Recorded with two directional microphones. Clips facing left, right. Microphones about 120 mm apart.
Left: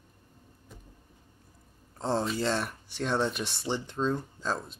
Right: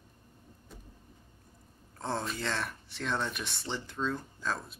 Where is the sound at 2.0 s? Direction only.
25° left (ahead or behind).